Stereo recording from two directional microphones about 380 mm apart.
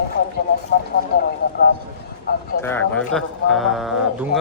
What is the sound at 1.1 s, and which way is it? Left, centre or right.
Speech, left.